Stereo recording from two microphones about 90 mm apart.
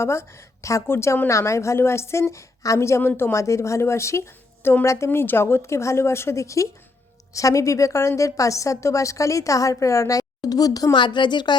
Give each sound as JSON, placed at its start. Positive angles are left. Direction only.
{"t": 0.0, "sound": "a woman's voice", "side_deg": 30}
{"t": 3.1, "sound": "speech", "side_deg": 20}
{"t": 3.3, "sound": "a woman's voice", "side_deg": 35}
{"t": 10.9, "sound": "a woman's voice", "side_deg": 60}